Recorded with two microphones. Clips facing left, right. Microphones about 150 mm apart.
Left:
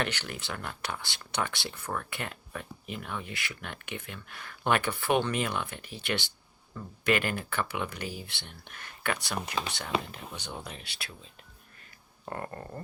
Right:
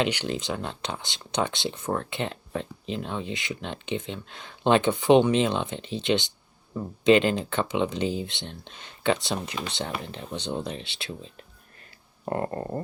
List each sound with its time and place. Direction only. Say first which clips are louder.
0.0 s speech: right 7 dB; 15° right (ahead or behind)
12.3 s speech: right 9 dB; 30° right (ahead or behind)